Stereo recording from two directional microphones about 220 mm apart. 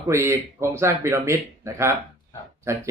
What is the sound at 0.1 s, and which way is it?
Speech, 10° right (ahead or behind).